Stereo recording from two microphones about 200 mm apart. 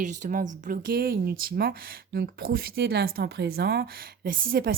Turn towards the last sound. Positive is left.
turn(degrees=-45)  # may be behind; listen again after turning